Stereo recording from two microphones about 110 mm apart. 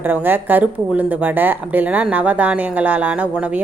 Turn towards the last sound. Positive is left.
turn(degrees=-15)  # may be behind; listen again after turning